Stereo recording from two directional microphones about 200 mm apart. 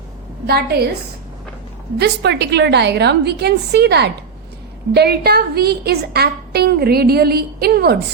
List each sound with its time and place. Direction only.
0.4 s a woman's voice: 50° right (ahead or behind)
2.0 s a woman's voice: 55° right (ahead or behind)